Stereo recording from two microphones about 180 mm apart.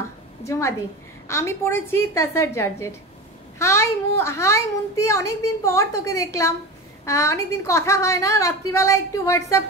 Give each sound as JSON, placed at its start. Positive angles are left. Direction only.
{"t": 0.5, "sound": "a woman's voice", "side_deg": 15}